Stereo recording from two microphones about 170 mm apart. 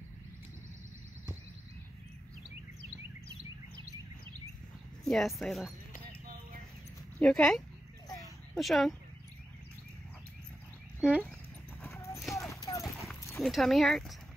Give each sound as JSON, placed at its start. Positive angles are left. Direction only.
{"t": 5.0, "sound": "speech", "side_deg": 0}
{"t": 7.2, "sound": "speech", "side_deg": 5}
{"t": 11.0, "sound": "speech", "side_deg": -5}
{"t": 11.8, "sound": "clip-clop", "side_deg": 15}
{"t": 13.4, "sound": "speech", "side_deg": 0}